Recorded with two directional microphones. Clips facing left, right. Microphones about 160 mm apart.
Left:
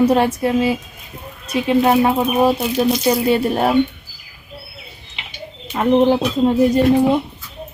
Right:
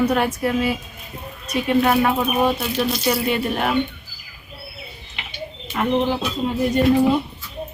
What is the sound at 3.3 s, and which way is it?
Speech, 35° left (ahead or behind).